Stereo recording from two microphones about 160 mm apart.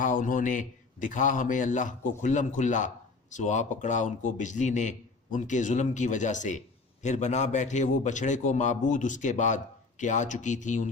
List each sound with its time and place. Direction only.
0.0 s a man's voice: 55° left (ahead or behind)